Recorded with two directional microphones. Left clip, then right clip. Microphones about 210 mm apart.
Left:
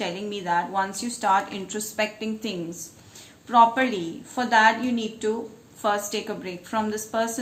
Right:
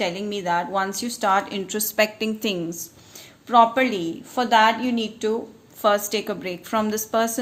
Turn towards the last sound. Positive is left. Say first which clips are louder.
# right 3 dB
turn(degrees=-45)  # may be behind; listen again after turning